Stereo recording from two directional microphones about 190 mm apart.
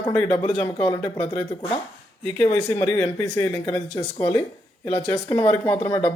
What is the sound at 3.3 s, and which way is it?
Speech, 15° left (ahead or behind).